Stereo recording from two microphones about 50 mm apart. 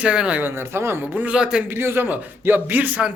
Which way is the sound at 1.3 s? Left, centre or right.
Centre.